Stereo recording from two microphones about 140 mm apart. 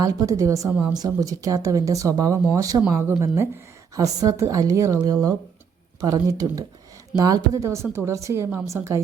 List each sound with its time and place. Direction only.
0.0 s speech: 25° right (ahead or behind)
0.7 s speech: 10° right (ahead or behind)
0.9 s speech: 25° right (ahead or behind)